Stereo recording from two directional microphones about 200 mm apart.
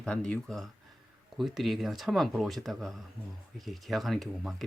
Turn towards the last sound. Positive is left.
turn(degrees=0)  # may be behind; listen again after turning